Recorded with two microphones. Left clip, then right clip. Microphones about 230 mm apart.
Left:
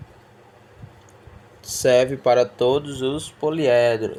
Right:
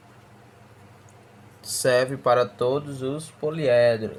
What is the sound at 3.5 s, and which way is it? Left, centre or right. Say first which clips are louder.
Speech: left 1 dB; left.